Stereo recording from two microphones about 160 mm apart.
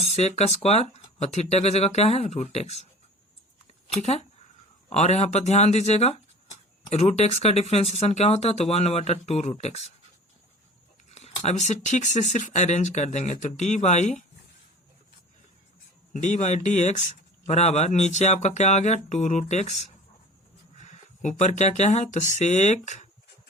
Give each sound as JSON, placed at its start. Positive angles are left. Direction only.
{"t": 0.0, "sound": "speech", "side_deg": 40}
{"t": 3.8, "sound": "speech", "side_deg": 45}
{"t": 11.1, "sound": "speech", "side_deg": 40}
{"t": 16.1, "sound": "speech", "side_deg": 45}